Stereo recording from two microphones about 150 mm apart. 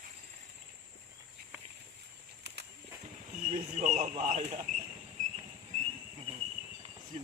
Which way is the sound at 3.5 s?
50° right (ahead or behind).